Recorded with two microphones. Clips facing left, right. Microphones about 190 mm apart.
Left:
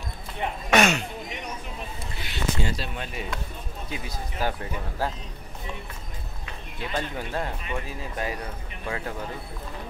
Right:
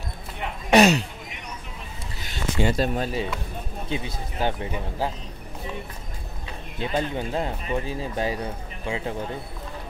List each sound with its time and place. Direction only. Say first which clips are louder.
0.7 s speech: right 5 dB; 35° right (ahead or behind)
2.1 s a sound: right 1 dB; 45° right (ahead or behind)
2.6 s speech: right 8 dB; 50° right (ahead or behind); by 5.1 s 15° right (ahead or behind)
6.8 s speech: right 5 dB; 25° right (ahead or behind)
8.8 s speech: right 3 dB; 15° right (ahead or behind)